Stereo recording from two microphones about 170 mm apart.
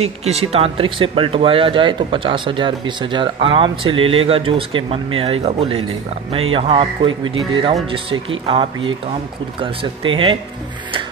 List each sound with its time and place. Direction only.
0.2 s speech: 35° right (ahead or behind)